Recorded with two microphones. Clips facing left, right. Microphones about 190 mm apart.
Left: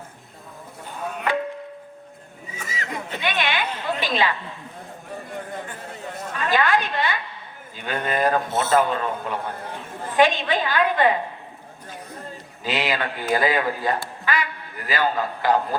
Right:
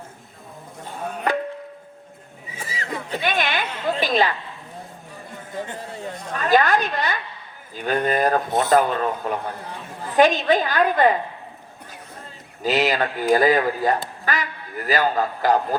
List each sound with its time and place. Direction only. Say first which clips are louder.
2.6 s neigh: right 1 dB; 30° right (ahead or behind)
4.0 s speech: right 3 dB; 45° right (ahead or behind)
6.3 s a woman's voice: right 3 dB; 40° right (ahead or behind)
12.6 s a woman's voice: right 4 dB; 40° right (ahead or behind)